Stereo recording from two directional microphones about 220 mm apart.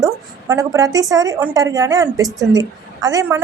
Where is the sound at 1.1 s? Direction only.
15° right (ahead or behind).